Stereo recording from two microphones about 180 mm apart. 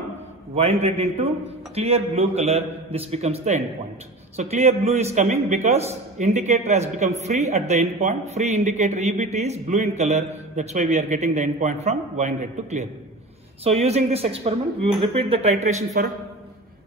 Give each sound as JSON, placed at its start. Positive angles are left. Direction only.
{"t": 0.6, "sound": "a man's voice", "side_deg": -35}